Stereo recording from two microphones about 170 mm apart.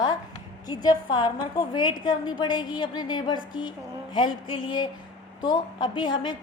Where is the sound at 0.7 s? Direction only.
25° left (ahead or behind).